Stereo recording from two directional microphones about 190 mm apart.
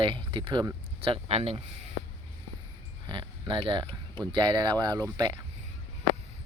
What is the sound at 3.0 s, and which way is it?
Speech, 25° right (ahead or behind).